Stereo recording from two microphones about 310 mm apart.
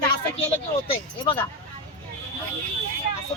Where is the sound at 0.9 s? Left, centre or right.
Centre.